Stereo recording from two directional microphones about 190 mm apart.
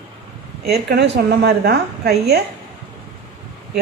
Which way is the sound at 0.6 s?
60° right (ahead or behind).